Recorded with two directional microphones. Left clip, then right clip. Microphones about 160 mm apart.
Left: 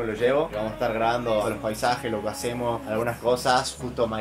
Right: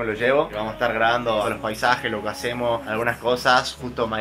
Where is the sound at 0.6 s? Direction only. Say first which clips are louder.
Right 4 dB; centre (ahead or behind).